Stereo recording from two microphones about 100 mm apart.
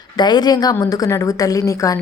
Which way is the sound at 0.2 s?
45° left (ahead or behind).